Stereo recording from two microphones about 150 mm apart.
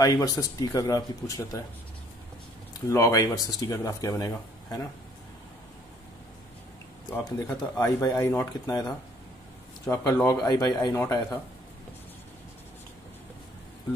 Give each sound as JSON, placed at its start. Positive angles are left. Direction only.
{"t": 0.0, "sound": "speech", "side_deg": 25}
{"t": 2.9, "sound": "speech", "side_deg": 20}
{"t": 7.2, "sound": "speech", "side_deg": 20}